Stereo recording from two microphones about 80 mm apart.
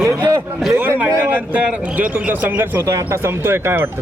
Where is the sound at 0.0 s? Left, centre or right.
Right.